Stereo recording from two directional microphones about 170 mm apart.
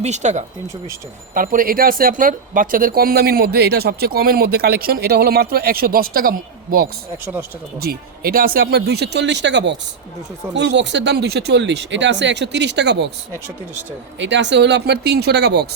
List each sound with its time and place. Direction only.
0.0 s speech: 45° right (ahead or behind)
1.3 s speech: 55° right (ahead or behind); by 13.1 s 85° right
14.2 s speech: 90° right